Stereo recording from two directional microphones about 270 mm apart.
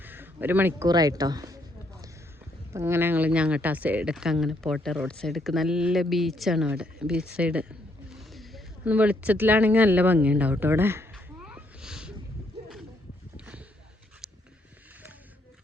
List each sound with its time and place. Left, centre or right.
0.0 s speech: centre
2.7 s speech: centre
13.3 s a sound: centre